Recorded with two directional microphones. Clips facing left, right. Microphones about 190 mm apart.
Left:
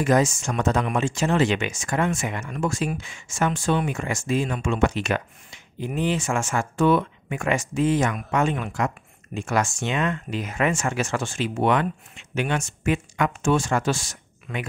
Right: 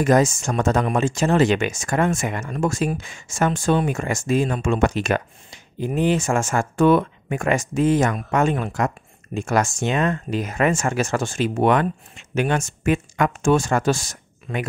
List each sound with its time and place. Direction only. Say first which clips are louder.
0.0 s speech: right 3 dB; 45° right (ahead or behind)